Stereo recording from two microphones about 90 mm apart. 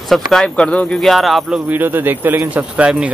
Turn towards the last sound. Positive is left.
turn(degrees=-10)  # may be behind; listen again after turning